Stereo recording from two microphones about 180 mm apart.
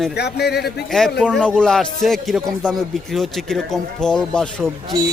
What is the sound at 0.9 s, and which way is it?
Speech, centre (ahead or behind).